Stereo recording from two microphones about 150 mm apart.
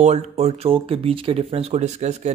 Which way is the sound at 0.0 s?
50° right (ahead or behind).